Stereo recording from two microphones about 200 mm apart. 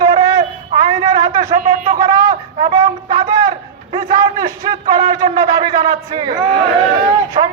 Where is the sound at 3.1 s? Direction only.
20° right (ahead or behind).